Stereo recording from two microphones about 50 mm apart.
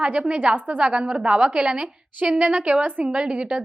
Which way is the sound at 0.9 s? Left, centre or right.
Centre.